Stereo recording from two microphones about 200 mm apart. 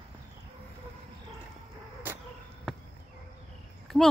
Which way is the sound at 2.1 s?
10° right (ahead or behind).